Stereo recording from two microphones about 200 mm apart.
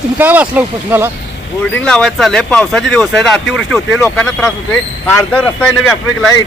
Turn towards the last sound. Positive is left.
turn(degrees=5)  # may be behind; listen again after turning